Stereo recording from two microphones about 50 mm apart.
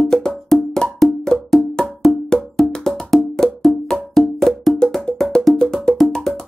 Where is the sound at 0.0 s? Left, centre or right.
Centre.